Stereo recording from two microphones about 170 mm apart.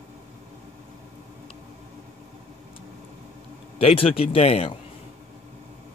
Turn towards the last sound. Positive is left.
turn(degrees=35)  # may be behind; listen again after turning